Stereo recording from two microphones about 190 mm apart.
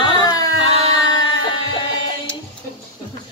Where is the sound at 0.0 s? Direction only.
25° left (ahead or behind).